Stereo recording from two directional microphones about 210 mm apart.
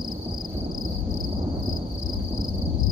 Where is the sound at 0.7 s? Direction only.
20° right (ahead or behind).